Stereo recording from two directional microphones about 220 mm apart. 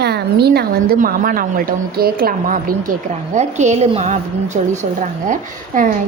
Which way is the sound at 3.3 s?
30° right (ahead or behind).